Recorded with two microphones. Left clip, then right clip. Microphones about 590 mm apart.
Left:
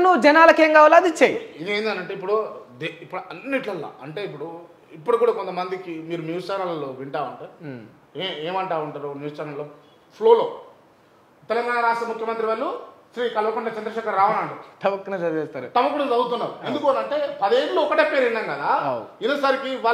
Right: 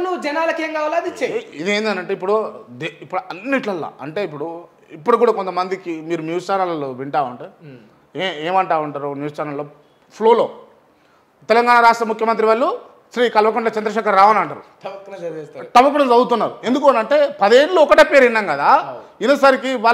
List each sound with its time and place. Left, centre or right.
0.0 s a woman's voice: left
1.6 s a man's voice: right
11.4 s a man's voice: right
14.8 s a woman's voice: left
15.7 s a man's voice: right